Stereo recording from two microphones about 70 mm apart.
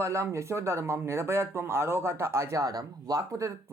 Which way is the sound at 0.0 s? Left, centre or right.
Right.